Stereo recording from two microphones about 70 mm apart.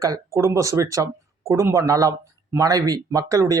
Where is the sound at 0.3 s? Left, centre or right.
Right.